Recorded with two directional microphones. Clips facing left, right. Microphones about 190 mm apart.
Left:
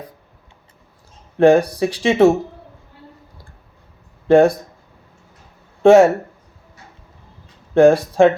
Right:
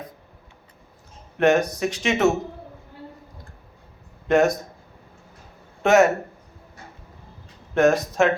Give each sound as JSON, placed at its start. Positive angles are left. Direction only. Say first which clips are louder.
{"t": 1.4, "sound": "speech", "louder": "left 7 dB", "side_deg": 30}
{"t": 4.3, "sound": "speech", "louder": "left 7 dB", "side_deg": 30}
{"t": 5.8, "sound": "speech", "louder": "left 7 dB", "side_deg": 30}
{"t": 7.7, "sound": "speech", "louder": "left 7 dB", "side_deg": 30}